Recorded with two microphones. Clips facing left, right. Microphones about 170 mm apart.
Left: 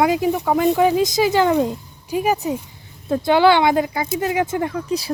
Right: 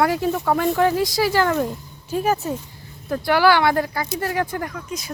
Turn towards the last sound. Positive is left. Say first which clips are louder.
# left 8 dB
turn(degrees=30)  # may be behind; listen again after turning